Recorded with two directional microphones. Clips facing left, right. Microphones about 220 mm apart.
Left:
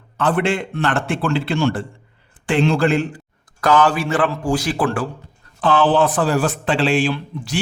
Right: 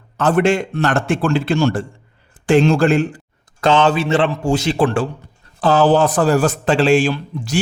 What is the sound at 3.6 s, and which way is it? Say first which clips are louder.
A man's voice: right 2 dB; 25° right (ahead or behind).